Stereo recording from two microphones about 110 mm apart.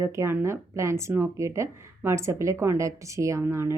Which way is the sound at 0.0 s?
25° right (ahead or behind).